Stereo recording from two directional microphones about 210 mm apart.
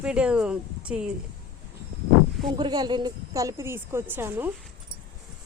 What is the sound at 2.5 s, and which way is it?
Speech, 20° right (ahead or behind).